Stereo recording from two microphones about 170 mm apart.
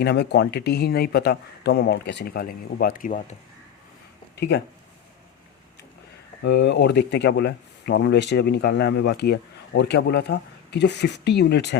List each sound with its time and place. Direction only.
0.0 s speech: 75° left (ahead or behind); by 3.3 s 50° left (ahead or behind)
4.4 s speech: 75° left (ahead or behind)
6.4 s speech: 90° left